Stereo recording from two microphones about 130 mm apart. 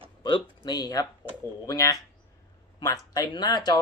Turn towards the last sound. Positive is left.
turn(degrees=30)  # may be behind; listen again after turning